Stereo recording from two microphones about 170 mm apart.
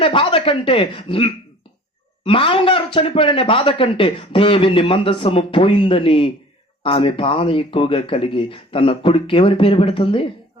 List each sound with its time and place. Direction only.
0.0 s speech: 30° left (ahead or behind)